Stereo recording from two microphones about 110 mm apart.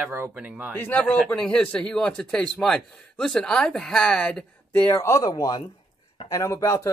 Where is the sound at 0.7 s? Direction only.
20° left (ahead or behind).